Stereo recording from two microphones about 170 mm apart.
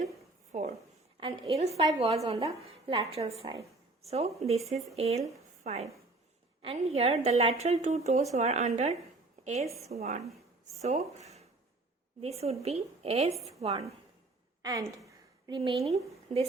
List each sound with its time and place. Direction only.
0.5 s speech: 40° right (ahead or behind)
3.4 s speech: 25° right (ahead or behind)
4.0 s a woman's voice: 40° right (ahead or behind)
14.6 s a sound: 20° right (ahead or behind)